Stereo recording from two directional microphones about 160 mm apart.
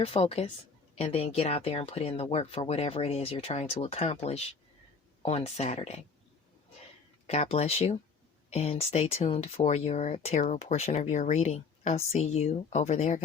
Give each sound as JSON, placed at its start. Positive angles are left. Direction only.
{"t": 0.0, "sound": "speech", "side_deg": 40}
{"t": 7.3, "sound": "speech", "side_deg": 40}